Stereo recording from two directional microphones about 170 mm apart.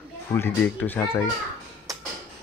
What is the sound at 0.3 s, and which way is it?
Speech, 10° left (ahead or behind).